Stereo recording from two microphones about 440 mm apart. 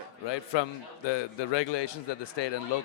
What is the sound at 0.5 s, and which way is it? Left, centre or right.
A man's voice, left.